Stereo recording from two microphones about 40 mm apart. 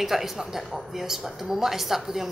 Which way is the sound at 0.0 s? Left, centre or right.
Centre.